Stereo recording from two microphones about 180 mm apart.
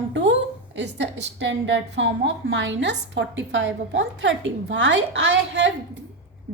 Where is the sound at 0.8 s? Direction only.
75° right (ahead or behind).